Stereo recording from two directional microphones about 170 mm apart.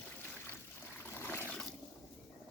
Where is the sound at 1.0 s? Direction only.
15° left (ahead or behind).